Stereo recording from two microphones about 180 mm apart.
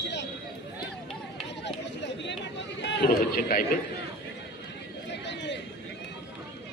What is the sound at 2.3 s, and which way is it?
Chatter, 75° left (ahead or behind).